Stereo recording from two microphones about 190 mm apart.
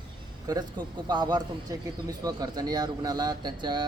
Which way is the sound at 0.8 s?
25° right (ahead or behind).